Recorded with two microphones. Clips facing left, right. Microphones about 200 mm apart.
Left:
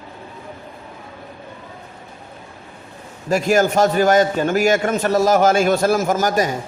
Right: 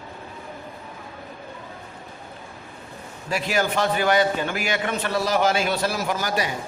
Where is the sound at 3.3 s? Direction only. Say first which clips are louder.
Left 8 dB; 45° left (ahead or behind).